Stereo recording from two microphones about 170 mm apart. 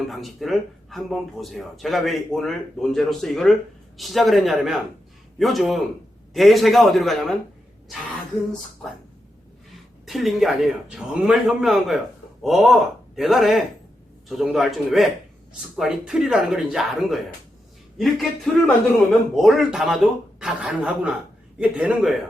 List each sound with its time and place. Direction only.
0.1 s speech: centre (ahead or behind)
10.1 s speech: centre (ahead or behind)